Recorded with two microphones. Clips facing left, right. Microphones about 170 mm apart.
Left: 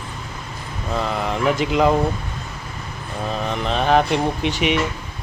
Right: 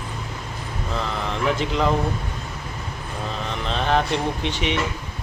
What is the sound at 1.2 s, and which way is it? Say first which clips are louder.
Speech: left 2 dB; 15° left (ahead or behind).